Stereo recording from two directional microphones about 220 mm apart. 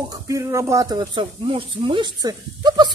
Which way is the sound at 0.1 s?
15° right (ahead or behind).